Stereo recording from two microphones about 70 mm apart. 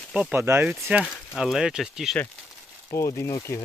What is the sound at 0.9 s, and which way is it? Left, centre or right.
Speech, centre.